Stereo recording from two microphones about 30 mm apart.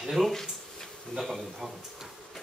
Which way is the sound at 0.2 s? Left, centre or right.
Centre.